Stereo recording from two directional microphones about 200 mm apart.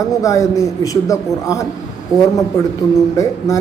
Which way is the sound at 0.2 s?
15° left (ahead or behind).